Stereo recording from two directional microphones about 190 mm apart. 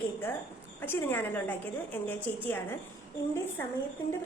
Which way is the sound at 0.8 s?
10° left (ahead or behind).